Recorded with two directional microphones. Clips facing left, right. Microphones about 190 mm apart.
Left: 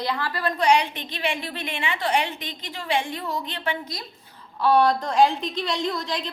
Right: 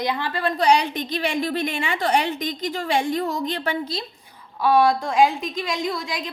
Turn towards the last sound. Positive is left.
turn(degrees=-10)  # may be behind; listen again after turning